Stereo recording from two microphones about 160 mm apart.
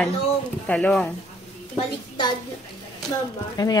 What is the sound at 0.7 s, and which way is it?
Speech, 5° left (ahead or behind).